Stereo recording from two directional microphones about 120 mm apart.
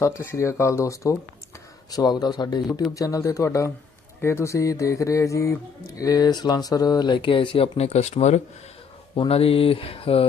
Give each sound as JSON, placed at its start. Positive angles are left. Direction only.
{"t": 0.0, "sound": "speech", "side_deg": 20}
{"t": 9.1, "sound": "speech", "side_deg": 50}